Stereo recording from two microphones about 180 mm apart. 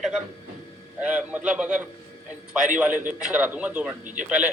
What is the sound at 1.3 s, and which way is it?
A man's voice, 5° right (ahead or behind).